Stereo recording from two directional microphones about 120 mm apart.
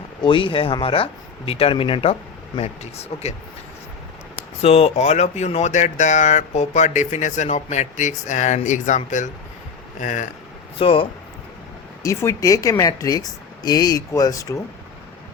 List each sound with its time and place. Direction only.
0.2 s speech: 45° left (ahead or behind)
2.6 s speech: 60° left (ahead or behind)
4.6 s speech: 55° left (ahead or behind); by 10.2 s 90° left
10.8 s speech: 50° left (ahead or behind)
12.0 s speech: 25° left (ahead or behind)